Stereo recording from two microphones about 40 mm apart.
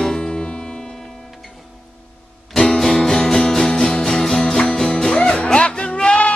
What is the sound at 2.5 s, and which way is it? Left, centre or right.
Music, centre.